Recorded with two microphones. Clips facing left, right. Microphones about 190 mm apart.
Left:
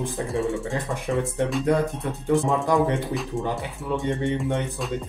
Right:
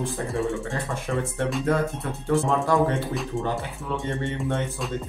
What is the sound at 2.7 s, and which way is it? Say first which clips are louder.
Speech: left 1 dB; 15° left (ahead or behind).